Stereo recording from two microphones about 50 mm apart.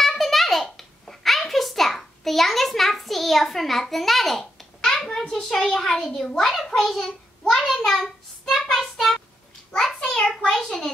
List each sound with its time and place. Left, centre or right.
0.0 s babbling: centre
5.3 s a child's voice: centre
7.1 s child singing: centre
8.7 s a sound: centre